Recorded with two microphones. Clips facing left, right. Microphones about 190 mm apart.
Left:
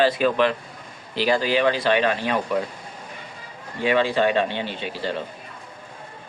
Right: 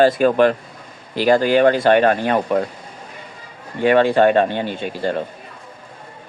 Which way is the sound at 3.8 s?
55° right (ahead or behind).